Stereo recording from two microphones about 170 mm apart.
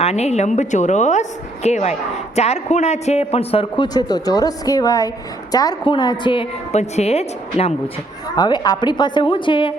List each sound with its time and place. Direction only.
0.0 s a woman's voice: 40° left (ahead or behind)
8.4 s a woman's voice: 25° left (ahead or behind)